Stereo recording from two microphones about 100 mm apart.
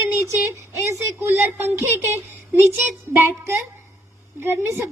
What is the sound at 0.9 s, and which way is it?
Speech, 25° right (ahead or behind).